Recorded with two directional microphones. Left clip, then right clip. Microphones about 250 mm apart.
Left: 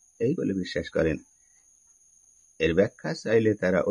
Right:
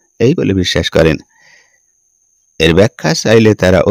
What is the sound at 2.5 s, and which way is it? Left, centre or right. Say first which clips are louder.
Speech: right 14 dB; right.